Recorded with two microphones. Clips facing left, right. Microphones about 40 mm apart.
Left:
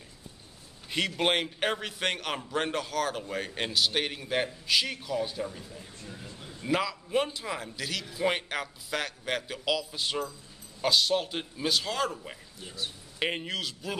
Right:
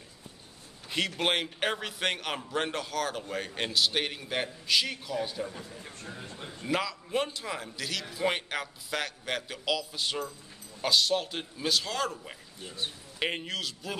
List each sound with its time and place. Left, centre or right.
0.8 s a man's voice: centre
6.1 s a sound: right
6.6 s a man's voice: centre